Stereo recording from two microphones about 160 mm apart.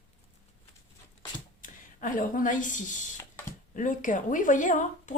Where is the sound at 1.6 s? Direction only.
55° left (ahead or behind).